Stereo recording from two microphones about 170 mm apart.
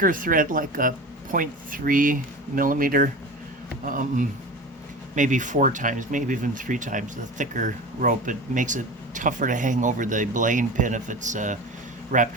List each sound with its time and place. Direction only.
0.0 s speech: 55° right (ahead or behind)